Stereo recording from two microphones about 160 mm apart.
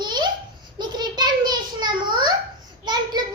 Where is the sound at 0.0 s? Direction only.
25° right (ahead or behind).